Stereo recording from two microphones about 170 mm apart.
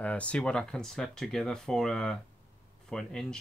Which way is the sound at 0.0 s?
5° left (ahead or behind).